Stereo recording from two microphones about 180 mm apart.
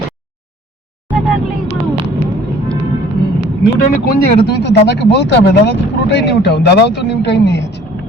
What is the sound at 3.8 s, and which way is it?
Speech, 55° left (ahead or behind).